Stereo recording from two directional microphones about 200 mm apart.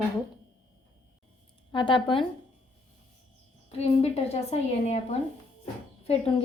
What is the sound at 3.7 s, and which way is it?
A woman's voice, 30° left (ahead or behind).